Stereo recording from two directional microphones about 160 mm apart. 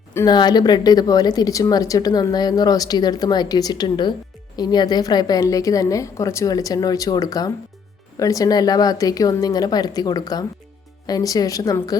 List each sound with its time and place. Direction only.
0.1 s a woman's voice: 15° left (ahead or behind)
0.3 s a woman's voice: 25° left (ahead or behind)